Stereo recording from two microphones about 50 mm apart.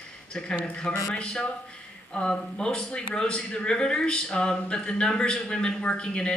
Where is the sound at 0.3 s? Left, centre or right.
Centre.